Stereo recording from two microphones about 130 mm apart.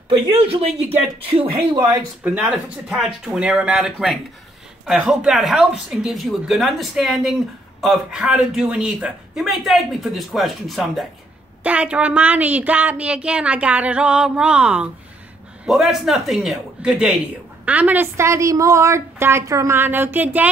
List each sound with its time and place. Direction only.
0.1 s speech: 45° right (ahead or behind)
2.2 s a woman's voice: 5° right (ahead or behind)